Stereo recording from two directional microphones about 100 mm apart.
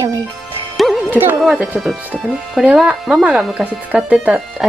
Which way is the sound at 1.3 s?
5° right (ahead or behind).